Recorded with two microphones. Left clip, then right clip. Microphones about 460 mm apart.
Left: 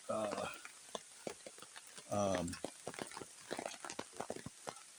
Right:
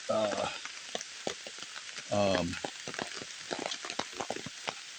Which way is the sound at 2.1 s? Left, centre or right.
Left.